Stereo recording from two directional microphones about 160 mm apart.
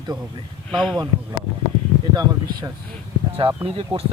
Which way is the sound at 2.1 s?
25° right (ahead or behind).